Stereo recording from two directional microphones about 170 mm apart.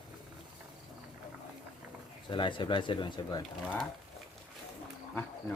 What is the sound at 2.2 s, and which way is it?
Speech, 30° left (ahead or behind).